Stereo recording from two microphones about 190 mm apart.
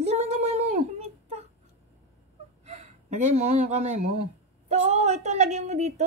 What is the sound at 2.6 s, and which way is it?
Speech, 35° right (ahead or behind).